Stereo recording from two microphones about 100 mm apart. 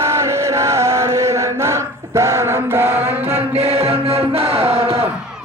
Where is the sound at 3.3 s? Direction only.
90° right.